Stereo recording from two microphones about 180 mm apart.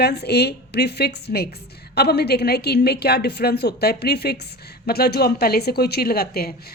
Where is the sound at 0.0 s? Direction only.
65° left (ahead or behind).